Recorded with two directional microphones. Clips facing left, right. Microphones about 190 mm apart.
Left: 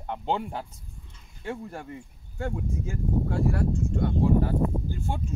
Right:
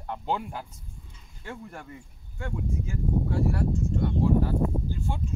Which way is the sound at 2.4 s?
50° left (ahead or behind).